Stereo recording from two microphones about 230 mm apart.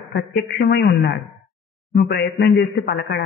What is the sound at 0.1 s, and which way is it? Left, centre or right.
Speech, left.